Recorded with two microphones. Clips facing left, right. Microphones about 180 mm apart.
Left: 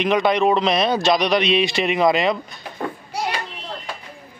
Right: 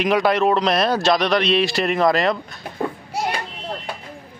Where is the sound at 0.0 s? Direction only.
5° right (ahead or behind).